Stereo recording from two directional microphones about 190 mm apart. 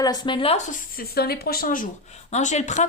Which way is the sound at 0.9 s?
55° left (ahead or behind).